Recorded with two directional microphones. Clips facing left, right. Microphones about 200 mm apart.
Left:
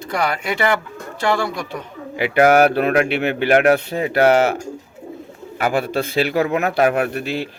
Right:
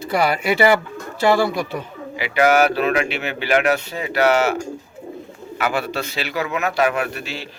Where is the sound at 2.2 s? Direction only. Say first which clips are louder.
Left 3 dB; 55° left (ahead or behind).